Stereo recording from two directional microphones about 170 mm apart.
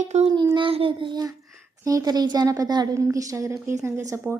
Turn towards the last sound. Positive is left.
turn(degrees=-10)  # may be behind; listen again after turning